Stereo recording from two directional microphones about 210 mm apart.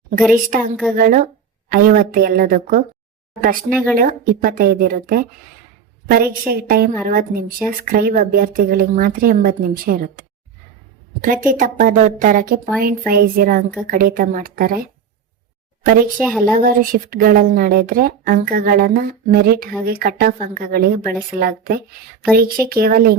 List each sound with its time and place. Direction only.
0.5 s a woman's voice: 40° right (ahead or behind)
16.1 s speech: 5° left (ahead or behind)
16.5 s a woman's voice: 40° right (ahead or behind)